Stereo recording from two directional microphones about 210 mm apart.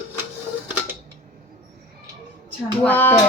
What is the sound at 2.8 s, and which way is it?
Speech, 10° left (ahead or behind).